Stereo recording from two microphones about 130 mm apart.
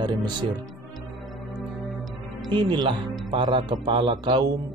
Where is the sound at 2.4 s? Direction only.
35° right (ahead or behind).